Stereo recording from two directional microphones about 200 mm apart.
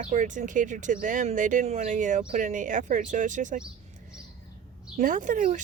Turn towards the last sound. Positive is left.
turn(degrees=-40)  # may be behind; listen again after turning